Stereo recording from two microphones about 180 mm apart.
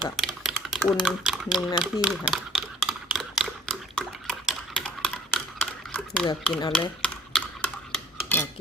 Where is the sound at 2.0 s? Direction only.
Centre (ahead or behind).